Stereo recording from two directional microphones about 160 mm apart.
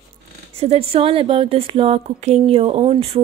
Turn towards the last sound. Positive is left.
turn(degrees=-40)  # may be behind; listen again after turning